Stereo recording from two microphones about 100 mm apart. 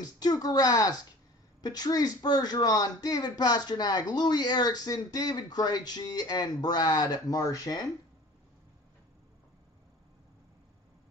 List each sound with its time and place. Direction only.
0.0 s a man's voice: 40° left (ahead or behind)